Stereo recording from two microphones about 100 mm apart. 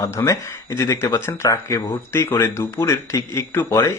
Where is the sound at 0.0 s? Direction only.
30° left (ahead or behind).